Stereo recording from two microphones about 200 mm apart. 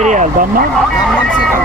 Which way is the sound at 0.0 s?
35° right (ahead or behind).